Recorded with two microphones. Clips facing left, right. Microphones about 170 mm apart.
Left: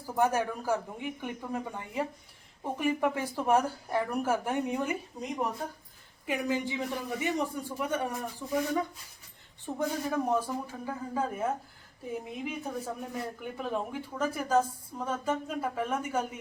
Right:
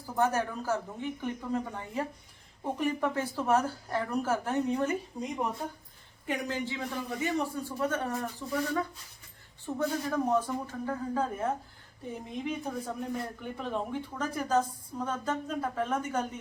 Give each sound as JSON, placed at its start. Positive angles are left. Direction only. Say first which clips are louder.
{"t": 0.0, "sound": "speech", "louder": "left 1 dB", "side_deg": 10}
{"t": 6.2, "sound": "speech", "louder": "left 2 dB", "side_deg": 10}